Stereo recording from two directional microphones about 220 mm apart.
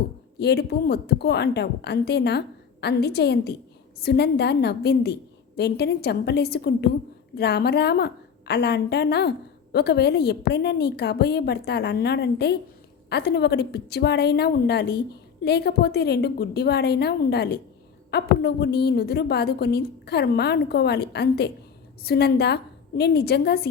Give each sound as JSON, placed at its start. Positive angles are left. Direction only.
{"t": 0.3, "sound": "a woman's voice", "side_deg": 50}